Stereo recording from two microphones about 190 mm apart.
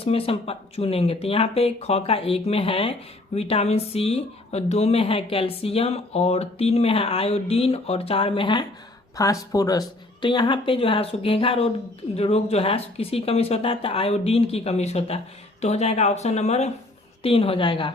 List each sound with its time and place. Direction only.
0.0 s a woman's voice: 30° left (ahead or behind)